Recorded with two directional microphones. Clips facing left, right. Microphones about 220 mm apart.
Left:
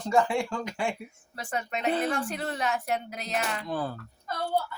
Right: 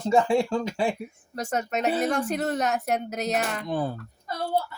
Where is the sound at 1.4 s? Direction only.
45° right (ahead or behind).